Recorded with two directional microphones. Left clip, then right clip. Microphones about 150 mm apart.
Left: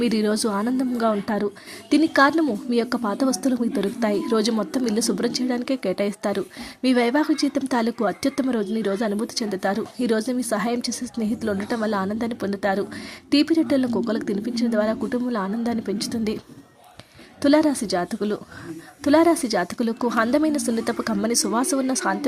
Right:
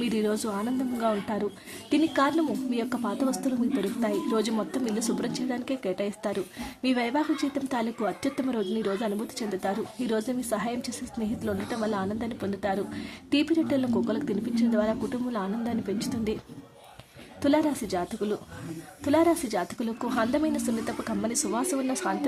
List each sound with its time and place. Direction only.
0.0 s speech: 35° left (ahead or behind)
17.4 s speech: 35° left (ahead or behind)